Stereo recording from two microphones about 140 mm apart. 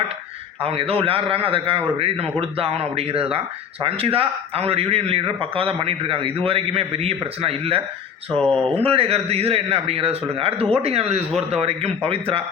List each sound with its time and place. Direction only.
0.6 s a man's voice: 45° right (ahead or behind)
8.4 s speech: 10° left (ahead or behind)
8.8 s speech: 45° right (ahead or behind)